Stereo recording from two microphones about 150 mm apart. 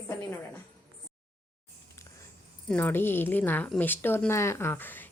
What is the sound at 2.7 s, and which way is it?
Speech, 10° left (ahead or behind).